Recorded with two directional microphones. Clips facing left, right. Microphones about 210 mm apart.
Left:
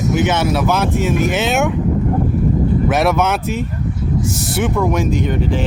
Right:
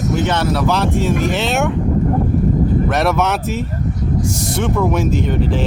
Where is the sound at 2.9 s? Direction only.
Centre (ahead or behind).